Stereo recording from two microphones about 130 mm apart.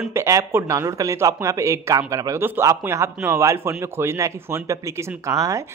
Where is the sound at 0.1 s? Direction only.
20° right (ahead or behind).